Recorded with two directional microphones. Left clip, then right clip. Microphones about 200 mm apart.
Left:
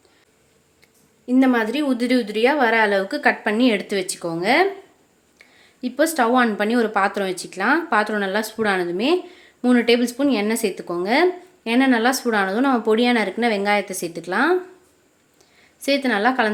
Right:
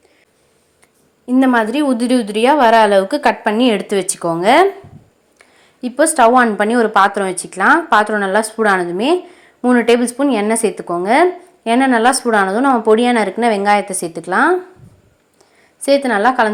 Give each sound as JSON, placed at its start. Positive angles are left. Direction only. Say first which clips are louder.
{"t": 1.3, "sound": "a woman's voice", "louder": "right 5 dB", "side_deg": -5}
{"t": 15.8, "sound": "a woman's voice", "louder": "right 6 dB", "side_deg": -5}